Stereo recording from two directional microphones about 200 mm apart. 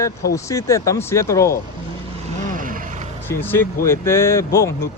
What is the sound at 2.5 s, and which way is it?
Vehicle, 45° right (ahead or behind).